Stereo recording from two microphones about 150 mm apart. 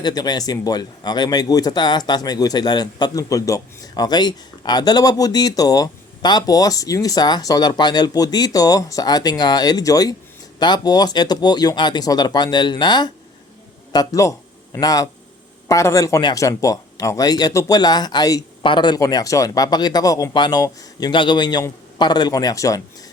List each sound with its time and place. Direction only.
0.0 s speech: 25° left (ahead or behind)